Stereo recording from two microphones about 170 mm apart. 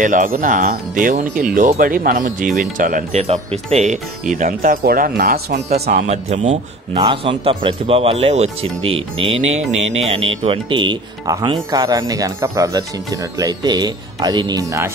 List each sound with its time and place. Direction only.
0.0 s speech: 50° right (ahead or behind); by 5.6 s 65° right (ahead or behind)
5.9 s speech: 45° right (ahead or behind); by 14.9 s 20° right (ahead or behind)